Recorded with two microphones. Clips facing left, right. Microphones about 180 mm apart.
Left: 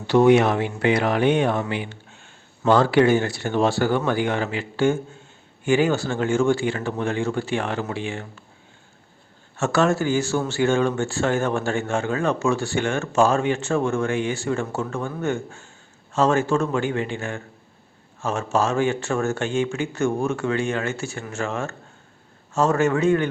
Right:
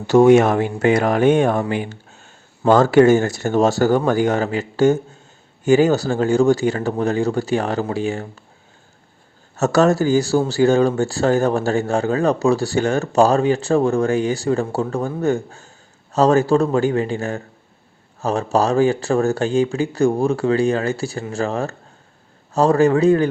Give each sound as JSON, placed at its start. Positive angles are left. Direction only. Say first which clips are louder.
{"t": 0.1, "sound": "speech", "louder": "right 4 dB", "side_deg": -45}
{"t": 9.6, "sound": "speech", "louder": "right 5 dB", "side_deg": -40}